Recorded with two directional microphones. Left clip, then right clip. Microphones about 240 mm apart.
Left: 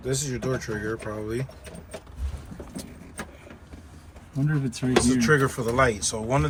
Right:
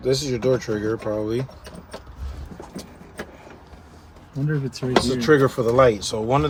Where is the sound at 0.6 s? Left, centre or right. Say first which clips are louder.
Right 6 dB; right.